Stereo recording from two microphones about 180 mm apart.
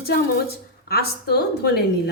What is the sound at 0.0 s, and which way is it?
A woman's voice, 60° left (ahead or behind).